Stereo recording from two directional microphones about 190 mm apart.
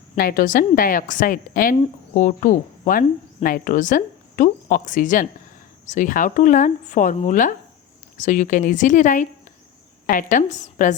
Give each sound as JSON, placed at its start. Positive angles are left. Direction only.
{"t": 0.2, "sound": "a woman's voice", "side_deg": 50}